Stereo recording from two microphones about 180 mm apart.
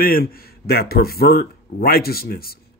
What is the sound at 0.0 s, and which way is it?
A man's voice, 55° left (ahead or behind).